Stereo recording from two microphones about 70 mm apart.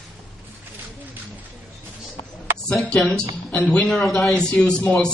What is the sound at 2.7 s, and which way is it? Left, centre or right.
A man's voice, centre.